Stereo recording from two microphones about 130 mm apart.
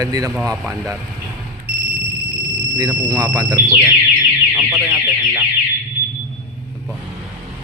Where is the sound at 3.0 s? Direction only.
30° right (ahead or behind).